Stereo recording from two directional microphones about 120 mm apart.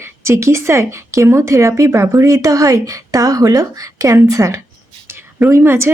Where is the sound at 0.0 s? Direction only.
25° right (ahead or behind).